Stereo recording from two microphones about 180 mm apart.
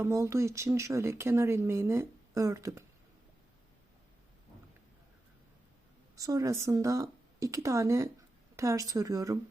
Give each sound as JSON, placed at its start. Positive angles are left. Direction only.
{"t": 0.0, "sound": "speech", "side_deg": -15}
{"t": 6.1, "sound": "speech", "side_deg": -20}